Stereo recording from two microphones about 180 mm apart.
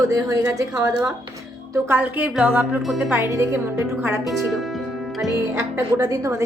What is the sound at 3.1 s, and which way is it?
Speech, 15° right (ahead or behind).